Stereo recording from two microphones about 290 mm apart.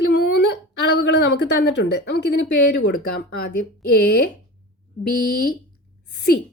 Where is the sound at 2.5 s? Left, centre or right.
Left.